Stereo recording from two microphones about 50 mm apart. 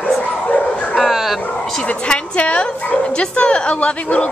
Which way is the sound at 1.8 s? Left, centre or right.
Left.